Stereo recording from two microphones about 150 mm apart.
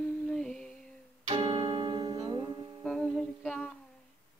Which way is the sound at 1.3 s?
40° right (ahead or behind).